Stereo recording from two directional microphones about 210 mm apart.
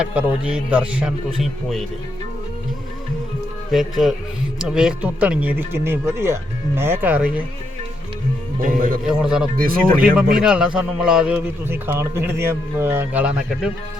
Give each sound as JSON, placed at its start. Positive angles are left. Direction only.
{"t": 0.0, "sound": "speech", "side_deg": -10}
{"t": 3.7, "sound": "a man's voice", "side_deg": 0}
{"t": 8.6, "sound": "a man's voice", "side_deg": -40}
{"t": 9.0, "sound": "speech", "side_deg": -5}
{"t": 9.6, "sound": "speech", "side_deg": -45}
{"t": 10.4, "sound": "a man's voice", "side_deg": -5}